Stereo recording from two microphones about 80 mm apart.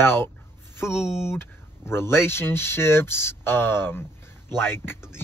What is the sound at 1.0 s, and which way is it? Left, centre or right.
Speech, centre.